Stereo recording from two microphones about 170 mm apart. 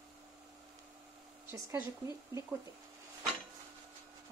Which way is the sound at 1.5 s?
15° right (ahead or behind).